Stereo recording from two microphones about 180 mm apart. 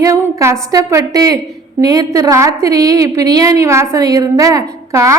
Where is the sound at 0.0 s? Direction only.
15° right (ahead or behind).